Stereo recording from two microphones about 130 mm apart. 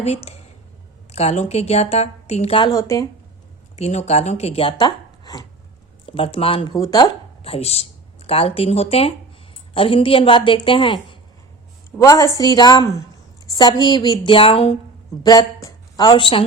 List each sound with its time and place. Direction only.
0.0 s a woman's voice: 55° left (ahead or behind)
2.7 s a woman's voice: 25° left (ahead or behind)
3.8 s speech: 55° left (ahead or behind); by 5.5 s 30° left (ahead or behind)
6.1 s speech: 45° left (ahead or behind)
6.7 s a woman's voice: 30° left (ahead or behind)
7.4 s speech: 50° left (ahead or behind)
11.9 s a woman's voice: 25° left (ahead or behind); by 14.8 s 45° left (ahead or behind)
15.2 s a woman's voice: 30° left (ahead or behind)